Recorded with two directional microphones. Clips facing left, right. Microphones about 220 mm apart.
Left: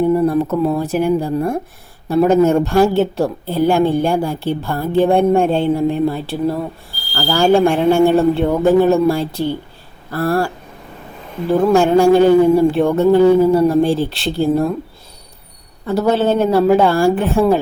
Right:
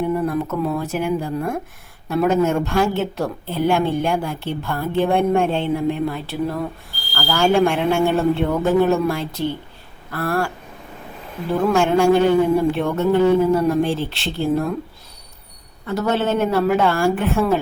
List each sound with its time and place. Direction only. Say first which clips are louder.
0.1 s speech: left 7 dB; 30° left (ahead or behind)
15.9 s speech: left 5 dB; 35° left (ahead or behind)